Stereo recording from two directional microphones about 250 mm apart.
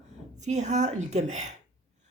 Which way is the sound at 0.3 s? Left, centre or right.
Right.